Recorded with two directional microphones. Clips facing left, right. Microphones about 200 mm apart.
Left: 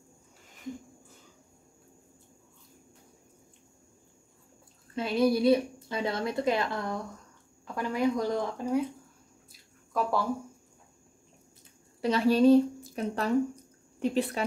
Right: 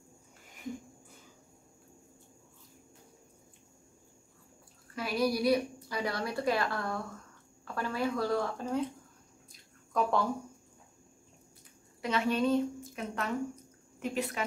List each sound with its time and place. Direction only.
4.9 s a woman's voice: 25° left (ahead or behind)
9.9 s speech: 5° left (ahead or behind)
12.0 s a woman's voice: 35° left (ahead or behind)